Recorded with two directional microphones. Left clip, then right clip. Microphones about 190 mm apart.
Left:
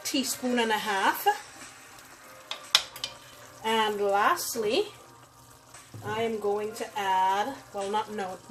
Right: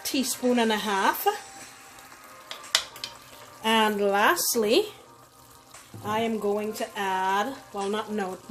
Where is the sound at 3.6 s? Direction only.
55° right (ahead or behind).